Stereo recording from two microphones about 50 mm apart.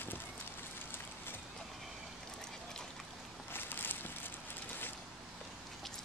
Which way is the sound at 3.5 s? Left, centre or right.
Left.